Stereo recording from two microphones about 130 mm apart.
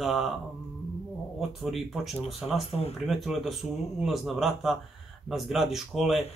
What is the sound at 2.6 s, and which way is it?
Speech, 50° left (ahead or behind).